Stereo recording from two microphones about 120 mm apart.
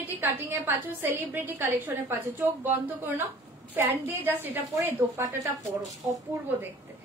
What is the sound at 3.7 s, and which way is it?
A woman's voice, 15° right (ahead or behind).